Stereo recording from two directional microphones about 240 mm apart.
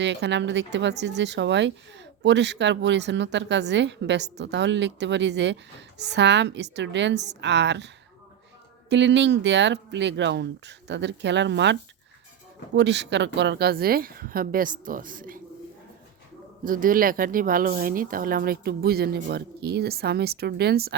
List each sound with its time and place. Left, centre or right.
0.0 s speech: right
8.9 s speech: right
16.6 s speech: right